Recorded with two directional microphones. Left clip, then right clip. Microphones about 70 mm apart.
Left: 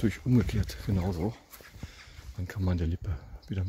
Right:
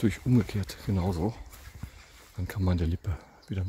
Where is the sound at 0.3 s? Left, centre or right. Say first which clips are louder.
Right 1 dB; centre.